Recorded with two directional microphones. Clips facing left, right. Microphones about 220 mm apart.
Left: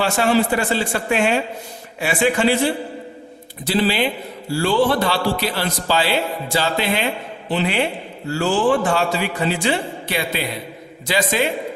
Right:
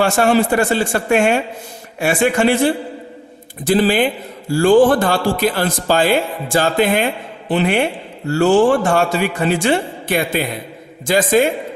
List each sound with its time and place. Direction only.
0.0 s a man's voice: 50° right (ahead or behind)
3.7 s a man's voice: 50° right (ahead or behind)
8.3 s speech: 60° right (ahead or behind)
8.5 s a man's voice: 45° right (ahead or behind)